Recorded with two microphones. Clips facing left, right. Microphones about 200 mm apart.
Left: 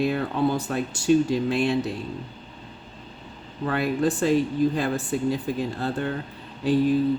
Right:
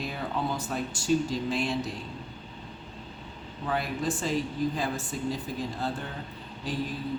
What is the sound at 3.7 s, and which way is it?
Speech, 65° left (ahead or behind).